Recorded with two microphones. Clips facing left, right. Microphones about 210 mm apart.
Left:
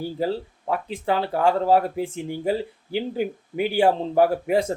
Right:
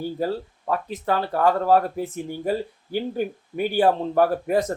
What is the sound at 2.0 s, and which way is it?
Speech, 25° left (ahead or behind).